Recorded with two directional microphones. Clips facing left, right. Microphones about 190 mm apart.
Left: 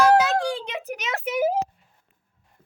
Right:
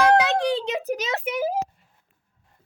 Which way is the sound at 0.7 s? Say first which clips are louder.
Right 5 dB; 35° right (ahead or behind).